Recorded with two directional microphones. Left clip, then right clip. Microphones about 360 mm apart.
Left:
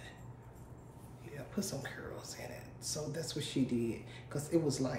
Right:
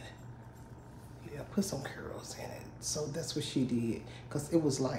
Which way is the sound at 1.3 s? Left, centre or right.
Centre.